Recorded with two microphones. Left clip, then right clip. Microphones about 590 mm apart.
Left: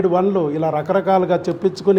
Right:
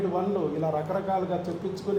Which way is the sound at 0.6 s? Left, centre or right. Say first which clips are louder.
Left 10 dB; left.